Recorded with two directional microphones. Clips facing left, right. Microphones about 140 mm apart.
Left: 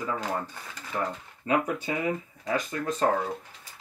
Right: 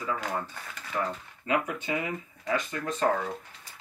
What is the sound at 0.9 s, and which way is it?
Speech, 25° left (ahead or behind).